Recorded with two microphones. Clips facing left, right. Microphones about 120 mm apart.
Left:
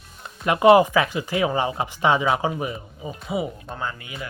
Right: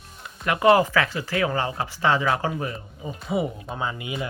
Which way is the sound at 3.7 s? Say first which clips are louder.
Right 2 dB; 10° right (ahead or behind).